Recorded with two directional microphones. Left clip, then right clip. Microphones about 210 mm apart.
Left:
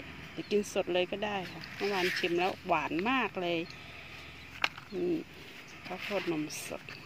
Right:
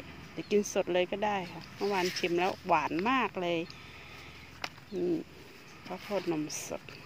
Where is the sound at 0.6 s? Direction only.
10° right (ahead or behind).